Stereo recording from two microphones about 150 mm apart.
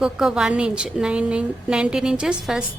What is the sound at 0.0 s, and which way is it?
A woman's voice, 5° right (ahead or behind).